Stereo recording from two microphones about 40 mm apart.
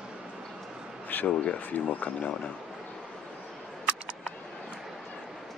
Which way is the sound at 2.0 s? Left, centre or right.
Left.